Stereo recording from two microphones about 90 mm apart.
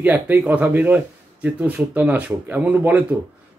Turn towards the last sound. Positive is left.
turn(degrees=-20)  # may be behind; listen again after turning